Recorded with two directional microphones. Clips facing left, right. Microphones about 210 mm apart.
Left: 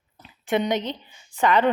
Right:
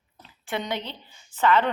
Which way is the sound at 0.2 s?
15° left (ahead or behind).